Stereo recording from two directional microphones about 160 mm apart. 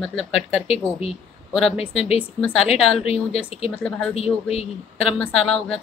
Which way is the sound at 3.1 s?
40° left (ahead or behind).